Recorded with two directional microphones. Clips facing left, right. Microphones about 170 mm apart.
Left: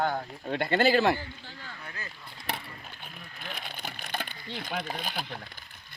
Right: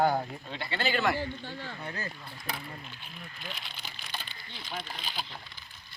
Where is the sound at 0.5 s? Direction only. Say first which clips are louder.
Left 8 dB; 50° left (ahead or behind).